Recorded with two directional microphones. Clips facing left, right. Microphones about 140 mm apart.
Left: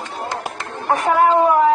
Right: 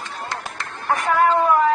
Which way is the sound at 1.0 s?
15° left (ahead or behind).